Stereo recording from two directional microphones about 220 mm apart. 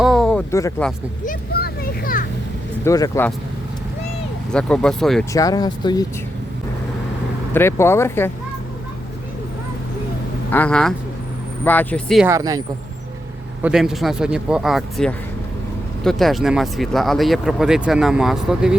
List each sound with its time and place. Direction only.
0.0 s a sound: centre (ahead or behind)
1.2 s a sound: 40° left (ahead or behind)
2.8 s speech: 15° left (ahead or behind)
4.5 s speech: 5° left (ahead or behind)
5.3 s speech: 15° left (ahead or behind)
7.5 s speech: 10° left (ahead or behind)
10.5 s speech: 5° left (ahead or behind)
12.3 s speech: 15° right (ahead or behind)
13.6 s speech: 5° right (ahead or behind)